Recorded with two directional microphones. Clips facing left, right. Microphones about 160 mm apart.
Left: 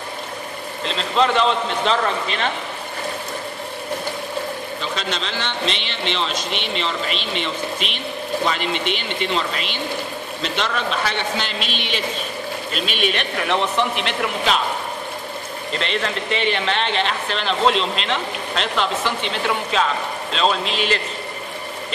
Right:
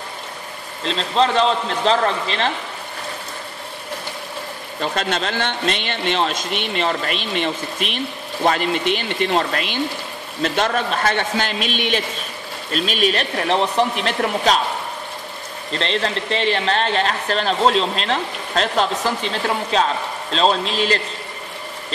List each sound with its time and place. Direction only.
0.8 s a man's voice: 35° right (ahead or behind)
4.7 s a man's voice: 50° right (ahead or behind)
15.8 s a man's voice: 35° right (ahead or behind)